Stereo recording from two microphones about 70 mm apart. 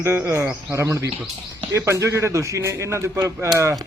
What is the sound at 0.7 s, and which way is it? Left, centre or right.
Speech, right.